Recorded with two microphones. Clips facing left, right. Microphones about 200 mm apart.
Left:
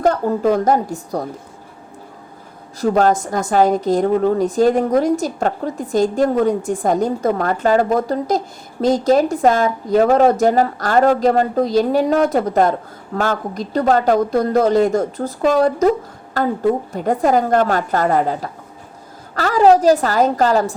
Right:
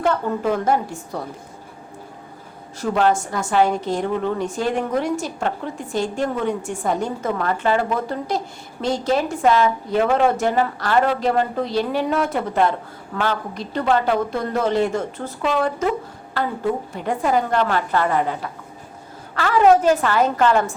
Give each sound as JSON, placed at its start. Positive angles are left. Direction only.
{"t": 0.0, "sound": "speech", "side_deg": 40}
{"t": 2.8, "sound": "speech", "side_deg": 40}